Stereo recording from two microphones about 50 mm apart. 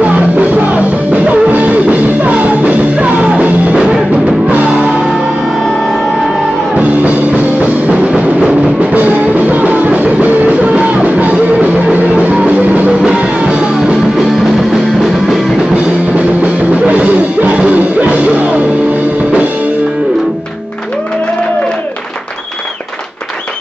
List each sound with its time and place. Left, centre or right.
0.0 s music: right
7.6 s music: right
13.0 s music: centre
16.8 s music: right